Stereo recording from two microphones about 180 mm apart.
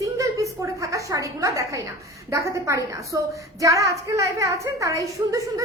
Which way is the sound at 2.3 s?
15° right (ahead or behind).